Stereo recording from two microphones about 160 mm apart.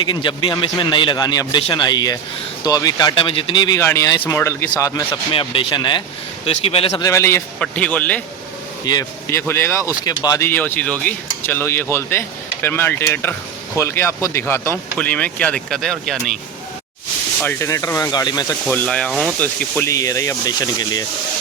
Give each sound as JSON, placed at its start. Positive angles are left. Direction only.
{"t": 0.0, "sound": "a man's voice", "side_deg": 30}
{"t": 3.8, "sound": "a man's voice", "side_deg": 20}
{"t": 5.3, "sound": "speech", "side_deg": 35}
{"t": 7.0, "sound": "speech", "side_deg": 20}
{"t": 8.8, "sound": "speech", "side_deg": 25}
{"t": 17.4, "sound": "a man's voice", "side_deg": 15}
{"t": 18.7, "sound": "speech", "side_deg": 10}